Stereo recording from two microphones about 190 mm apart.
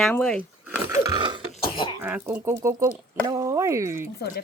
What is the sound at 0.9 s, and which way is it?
Speech, 15° right (ahead or behind).